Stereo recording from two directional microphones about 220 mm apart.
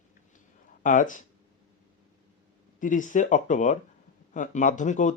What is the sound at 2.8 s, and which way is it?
Speech, 35° left (ahead or behind).